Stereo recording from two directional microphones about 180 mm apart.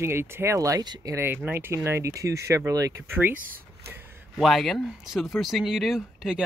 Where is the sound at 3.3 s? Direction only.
50° right (ahead or behind).